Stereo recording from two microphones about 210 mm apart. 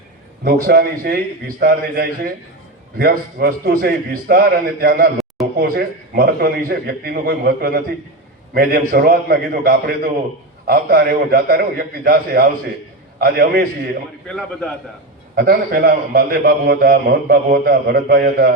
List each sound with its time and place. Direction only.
0.4 s a man's voice: 45° right (ahead or behind)
14.3 s a man's voice: 5° left (ahead or behind)
15.4 s a man's voice: 45° right (ahead or behind)